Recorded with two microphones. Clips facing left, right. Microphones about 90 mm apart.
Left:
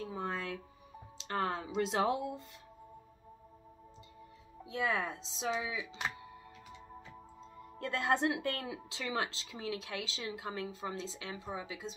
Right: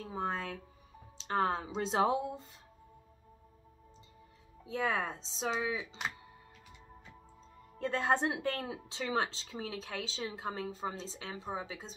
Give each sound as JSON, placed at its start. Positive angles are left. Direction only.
{"t": 0.1, "sound": "music", "side_deg": -35}
{"t": 1.2, "sound": "speech", "side_deg": -35}
{"t": 4.7, "sound": "a woman's voice", "side_deg": -35}
{"t": 7.8, "sound": "a woman's voice", "side_deg": -30}